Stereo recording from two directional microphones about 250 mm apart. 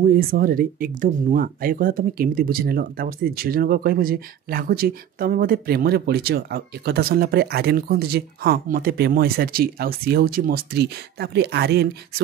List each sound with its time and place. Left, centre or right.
0.0 s speech: right